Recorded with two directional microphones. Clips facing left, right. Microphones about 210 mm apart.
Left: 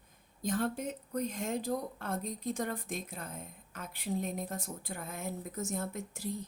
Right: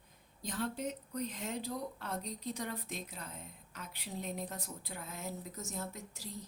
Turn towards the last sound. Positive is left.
turn(degrees=55)  # may be behind; listen again after turning